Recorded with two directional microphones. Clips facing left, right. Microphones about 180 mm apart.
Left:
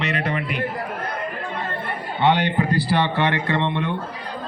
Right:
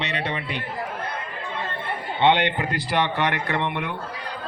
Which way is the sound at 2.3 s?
20° right (ahead or behind).